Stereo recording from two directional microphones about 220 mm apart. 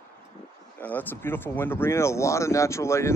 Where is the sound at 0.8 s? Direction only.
10° left (ahead or behind).